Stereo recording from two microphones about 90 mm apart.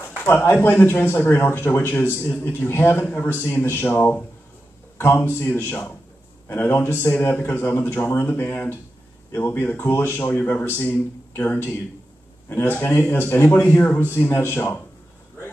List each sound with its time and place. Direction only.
0.1 s speech: 25° left (ahead or behind)